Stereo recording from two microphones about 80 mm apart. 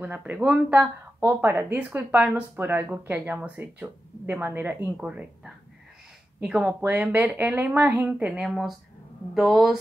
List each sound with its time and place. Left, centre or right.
0.0 s speech: right
8.4 s a woman's voice: centre